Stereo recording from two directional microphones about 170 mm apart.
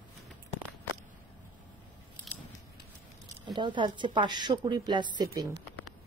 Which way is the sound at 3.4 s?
25° right (ahead or behind).